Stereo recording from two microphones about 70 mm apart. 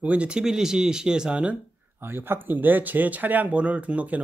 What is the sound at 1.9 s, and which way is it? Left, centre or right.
Speech, right.